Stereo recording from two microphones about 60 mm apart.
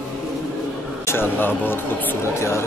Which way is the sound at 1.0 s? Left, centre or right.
Left.